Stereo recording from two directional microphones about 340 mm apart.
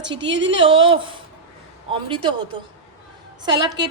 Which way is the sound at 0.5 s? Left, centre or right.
Centre.